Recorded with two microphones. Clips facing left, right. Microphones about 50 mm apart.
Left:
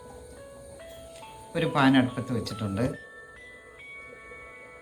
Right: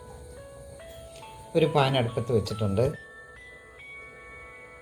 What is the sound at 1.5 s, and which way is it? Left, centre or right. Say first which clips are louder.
Speech: left 1 dB; centre.